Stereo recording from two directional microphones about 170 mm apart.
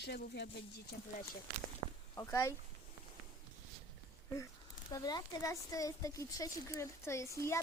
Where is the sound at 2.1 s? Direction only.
20° left (ahead or behind).